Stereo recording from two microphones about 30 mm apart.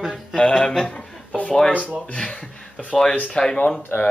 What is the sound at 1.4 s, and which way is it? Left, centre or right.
Speech, left.